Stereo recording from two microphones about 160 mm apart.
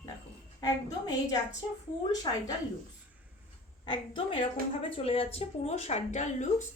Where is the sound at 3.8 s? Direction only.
30° left (ahead or behind).